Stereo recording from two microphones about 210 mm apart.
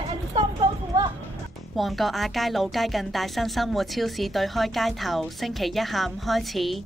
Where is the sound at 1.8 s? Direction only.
Centre (ahead or behind).